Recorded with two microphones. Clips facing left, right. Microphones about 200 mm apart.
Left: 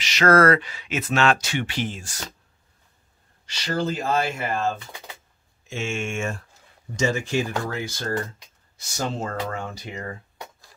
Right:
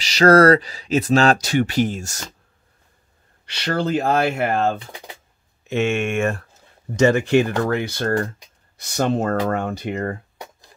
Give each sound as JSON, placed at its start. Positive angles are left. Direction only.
{"t": 0.0, "sound": "speech", "side_deg": -35}
{"t": 3.4, "sound": "speech", "side_deg": -65}